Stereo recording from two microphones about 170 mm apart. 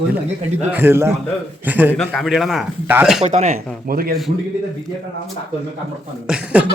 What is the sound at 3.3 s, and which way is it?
Speech, 40° right (ahead or behind).